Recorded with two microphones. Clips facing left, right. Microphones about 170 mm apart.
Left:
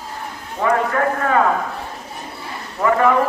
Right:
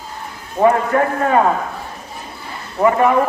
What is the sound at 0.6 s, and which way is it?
Speech, 25° right (ahead or behind).